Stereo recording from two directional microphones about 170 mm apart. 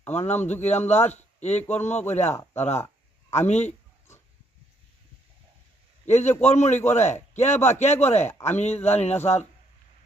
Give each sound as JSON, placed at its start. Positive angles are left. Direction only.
{"t": 0.1, "sound": "a man's voice", "side_deg": 40}
{"t": 2.3, "sound": "speech", "side_deg": 15}
{"t": 2.6, "sound": "a man's voice", "side_deg": 40}
{"t": 6.1, "sound": "a man's voice", "side_deg": 40}